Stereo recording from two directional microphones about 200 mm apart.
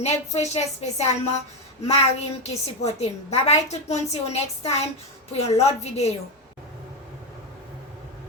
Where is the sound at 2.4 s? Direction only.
35° left (ahead or behind).